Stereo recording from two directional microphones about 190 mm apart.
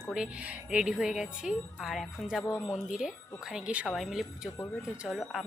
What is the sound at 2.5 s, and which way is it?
Speech, 15° left (ahead or behind).